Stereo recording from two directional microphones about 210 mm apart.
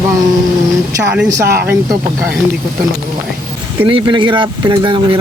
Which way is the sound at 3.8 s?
25° right (ahead or behind).